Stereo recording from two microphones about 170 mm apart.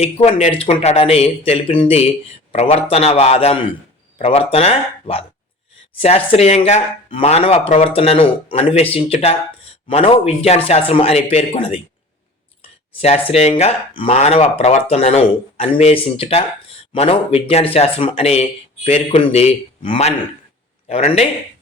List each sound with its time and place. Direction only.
0.0 s speech: 40° left (ahead or behind)
13.3 s a man's voice: 40° left (ahead or behind)